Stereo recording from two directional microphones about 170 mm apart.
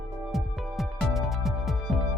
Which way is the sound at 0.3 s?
Centre (ahead or behind).